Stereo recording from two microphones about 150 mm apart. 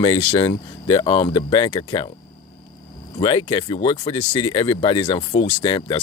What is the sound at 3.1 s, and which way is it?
Speech, 35° left (ahead or behind).